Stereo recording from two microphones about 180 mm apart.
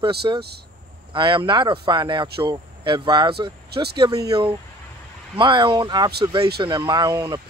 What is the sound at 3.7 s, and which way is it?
Speech, 65° right (ahead or behind).